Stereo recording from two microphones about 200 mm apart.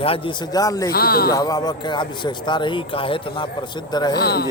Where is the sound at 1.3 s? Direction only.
15° left (ahead or behind).